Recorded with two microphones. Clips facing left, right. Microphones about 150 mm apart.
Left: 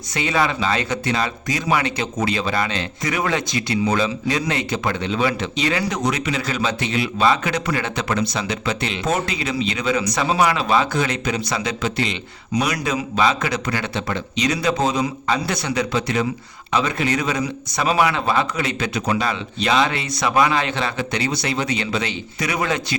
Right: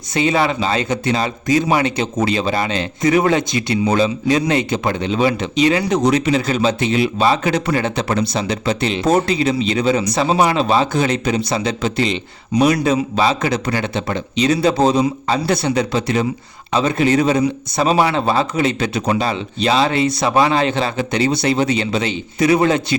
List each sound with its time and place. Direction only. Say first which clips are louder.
0.1 s speech: right 4 dB; 25° right (ahead or behind)